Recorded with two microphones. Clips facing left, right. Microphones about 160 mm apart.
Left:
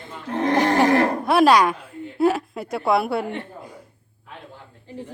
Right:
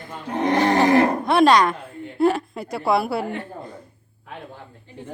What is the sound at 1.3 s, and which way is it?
A woman's voice, 5° left (ahead or behind).